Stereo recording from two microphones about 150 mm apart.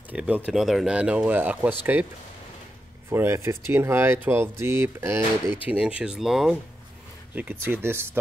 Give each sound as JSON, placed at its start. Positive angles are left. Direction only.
{"t": 0.1, "sound": "speech", "side_deg": -10}
{"t": 3.1, "sound": "speech", "side_deg": -15}